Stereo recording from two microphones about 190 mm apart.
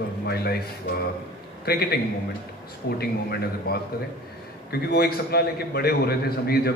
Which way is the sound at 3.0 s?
55° left (ahead or behind).